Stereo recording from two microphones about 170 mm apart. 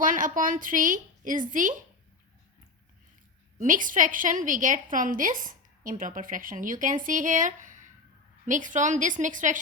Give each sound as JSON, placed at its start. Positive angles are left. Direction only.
{"t": 0.0, "sound": "a woman's voice", "side_deg": -50}
{"t": 3.6, "sound": "a woman's voice", "side_deg": -50}